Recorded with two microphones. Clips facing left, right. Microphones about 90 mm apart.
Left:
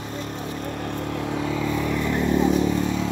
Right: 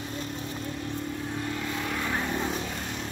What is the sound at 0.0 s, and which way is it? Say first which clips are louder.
Vehicle: left 4 dB; 45° left (ahead or behind).